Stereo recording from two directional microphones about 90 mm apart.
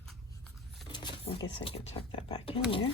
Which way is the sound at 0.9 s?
60° left (ahead or behind).